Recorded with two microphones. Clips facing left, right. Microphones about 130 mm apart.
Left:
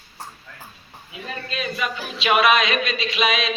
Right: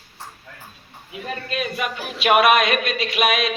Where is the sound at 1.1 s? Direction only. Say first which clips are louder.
Right 3 dB; 55° right (ahead or behind).